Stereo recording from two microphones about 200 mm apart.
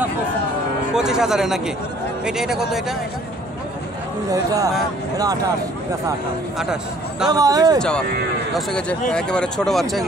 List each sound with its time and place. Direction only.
0.9 s speech: 5° right (ahead or behind)
4.3 s speech: 15° right (ahead or behind)
6.6 s speech: 5° right (ahead or behind)
7.2 s speech: 20° right (ahead or behind)
8.5 s speech: 5° left (ahead or behind)